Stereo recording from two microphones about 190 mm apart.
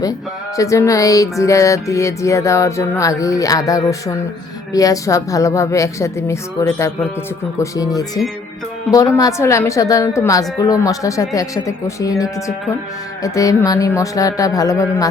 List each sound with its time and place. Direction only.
0.5 s music: 15° left (ahead or behind)
7.6 s speech: 20° left (ahead or behind)
9.1 s music: 15° left (ahead or behind)
13.2 s music: 20° left (ahead or behind)